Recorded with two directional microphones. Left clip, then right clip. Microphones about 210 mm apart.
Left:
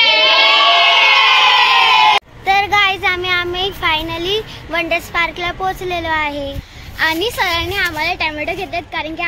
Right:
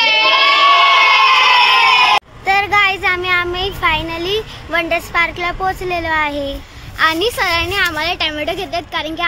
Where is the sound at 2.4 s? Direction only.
5° right (ahead or behind).